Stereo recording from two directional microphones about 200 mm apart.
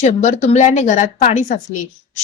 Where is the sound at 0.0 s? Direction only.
35° left (ahead or behind).